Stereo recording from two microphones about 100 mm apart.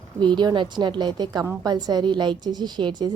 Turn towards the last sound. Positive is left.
turn(degrees=-50)  # may be behind; listen again after turning